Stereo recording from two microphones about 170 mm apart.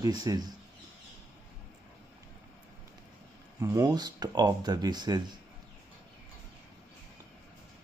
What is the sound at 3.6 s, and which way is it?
Speech, 20° right (ahead or behind).